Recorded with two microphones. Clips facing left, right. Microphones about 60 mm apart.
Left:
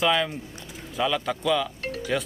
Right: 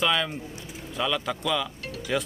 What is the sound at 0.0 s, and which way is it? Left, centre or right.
A man's voice, centre.